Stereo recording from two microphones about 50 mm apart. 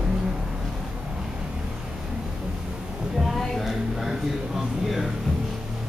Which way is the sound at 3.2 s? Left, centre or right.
Centre.